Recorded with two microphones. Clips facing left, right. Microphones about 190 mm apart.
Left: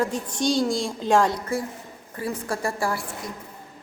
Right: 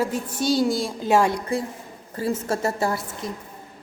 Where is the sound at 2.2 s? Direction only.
25° right (ahead or behind).